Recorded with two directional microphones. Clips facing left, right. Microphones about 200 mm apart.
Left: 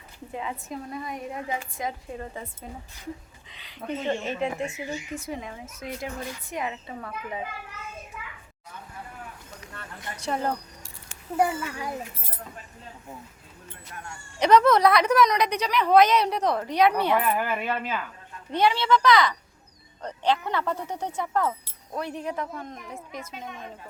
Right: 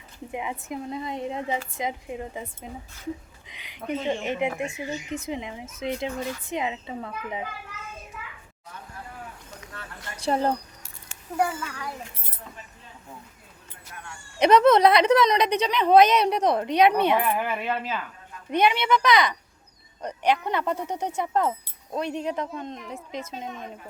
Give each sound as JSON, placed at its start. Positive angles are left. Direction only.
{"t": 0.3, "sound": "a woman's voice", "side_deg": -15}
{"t": 10.2, "sound": "speech", "side_deg": -30}
{"t": 11.3, "sound": "a child's voice", "side_deg": 15}
{"t": 14.3, "sound": "a woman's voice", "side_deg": -20}
{"t": 17.2, "sound": "speech", "side_deg": 0}
{"t": 18.5, "sound": "a woman's voice", "side_deg": -20}